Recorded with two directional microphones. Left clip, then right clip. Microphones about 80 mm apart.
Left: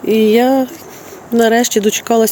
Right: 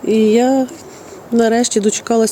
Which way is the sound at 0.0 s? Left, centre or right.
Centre.